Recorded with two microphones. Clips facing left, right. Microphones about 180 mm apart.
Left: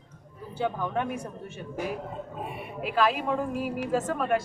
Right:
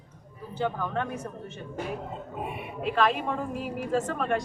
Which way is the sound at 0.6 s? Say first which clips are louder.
Left 1 dB; 15° left (ahead or behind).